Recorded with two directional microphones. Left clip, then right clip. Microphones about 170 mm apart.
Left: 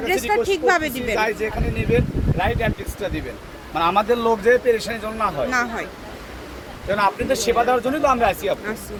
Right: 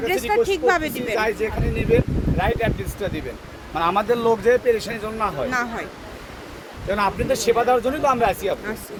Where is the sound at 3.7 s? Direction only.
25° right (ahead or behind).